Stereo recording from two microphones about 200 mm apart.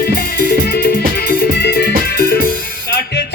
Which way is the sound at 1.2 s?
55° left (ahead or behind).